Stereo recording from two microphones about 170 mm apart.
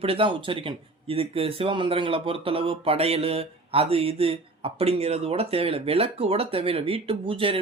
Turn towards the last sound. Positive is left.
turn(degrees=-30)  # may be behind; listen again after turning